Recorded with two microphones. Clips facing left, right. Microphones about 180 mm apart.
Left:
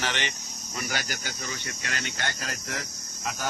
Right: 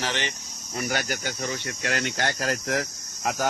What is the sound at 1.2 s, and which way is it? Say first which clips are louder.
Speech: right 6 dB; 55° right (ahead or behind).